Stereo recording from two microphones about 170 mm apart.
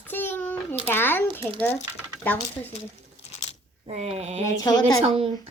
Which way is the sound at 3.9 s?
40° right (ahead or behind).